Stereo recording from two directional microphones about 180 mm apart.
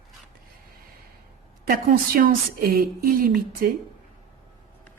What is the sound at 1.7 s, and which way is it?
Speech, 50° right (ahead or behind).